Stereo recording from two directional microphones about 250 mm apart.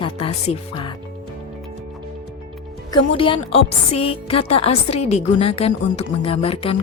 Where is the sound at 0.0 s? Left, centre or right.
Left.